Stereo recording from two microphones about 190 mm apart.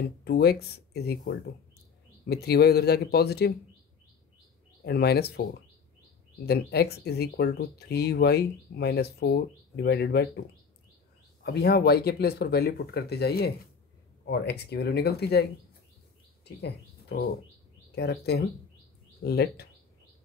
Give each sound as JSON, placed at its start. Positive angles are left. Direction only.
{"t": 0.2, "sound": "speech", "side_deg": 55}
{"t": 4.8, "sound": "speech", "side_deg": 55}
{"t": 11.4, "sound": "speech", "side_deg": 60}
{"t": 16.4, "sound": "speech", "side_deg": 55}